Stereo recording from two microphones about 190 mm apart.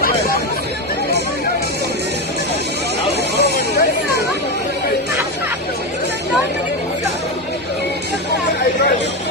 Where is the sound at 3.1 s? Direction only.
60° left (ahead or behind).